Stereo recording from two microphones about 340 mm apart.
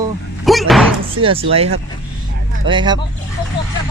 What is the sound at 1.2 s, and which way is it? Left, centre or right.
Speech, centre.